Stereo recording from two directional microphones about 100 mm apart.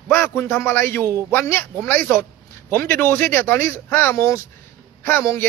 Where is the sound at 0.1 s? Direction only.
20° left (ahead or behind).